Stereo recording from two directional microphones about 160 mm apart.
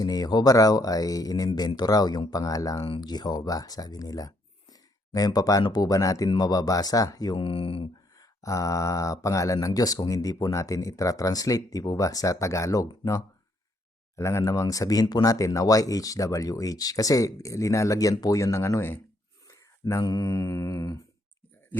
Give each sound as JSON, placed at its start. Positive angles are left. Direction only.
{"t": 0.0, "sound": "speech", "side_deg": 25}
{"t": 8.2, "sound": "speech", "side_deg": 20}
{"t": 19.5, "sound": "mantra", "side_deg": 20}